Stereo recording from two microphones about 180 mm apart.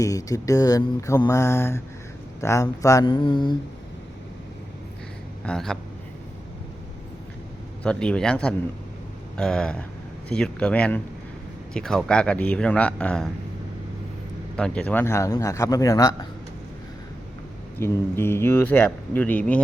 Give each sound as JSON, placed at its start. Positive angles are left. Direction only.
{"t": 0.0, "sound": "mantra", "side_deg": 20}
{"t": 5.5, "sound": "speech", "side_deg": 5}
{"t": 7.9, "sound": "speech", "side_deg": 5}
{"t": 14.5, "sound": "speech", "side_deg": 5}
{"t": 17.7, "sound": "speech", "side_deg": 10}